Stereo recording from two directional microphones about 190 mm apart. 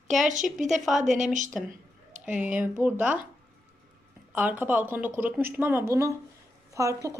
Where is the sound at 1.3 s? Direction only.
40° right (ahead or behind).